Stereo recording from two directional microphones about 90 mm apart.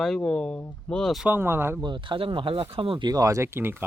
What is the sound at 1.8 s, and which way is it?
Speech, 65° right (ahead or behind).